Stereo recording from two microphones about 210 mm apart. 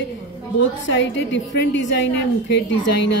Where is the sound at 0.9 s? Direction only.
60° left (ahead or behind).